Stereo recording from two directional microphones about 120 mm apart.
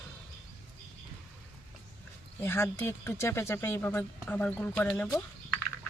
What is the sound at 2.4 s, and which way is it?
Speech, 20° left (ahead or behind).